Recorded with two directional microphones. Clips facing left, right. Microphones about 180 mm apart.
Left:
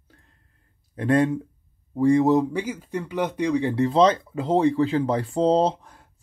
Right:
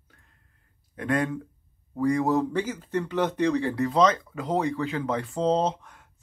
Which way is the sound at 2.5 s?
10° left (ahead or behind).